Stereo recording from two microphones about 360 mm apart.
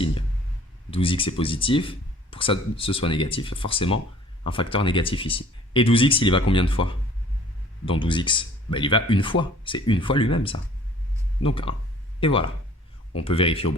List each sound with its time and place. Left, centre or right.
0.9 s speech: centre